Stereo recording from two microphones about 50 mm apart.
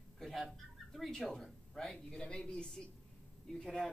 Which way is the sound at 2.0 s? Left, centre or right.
Centre.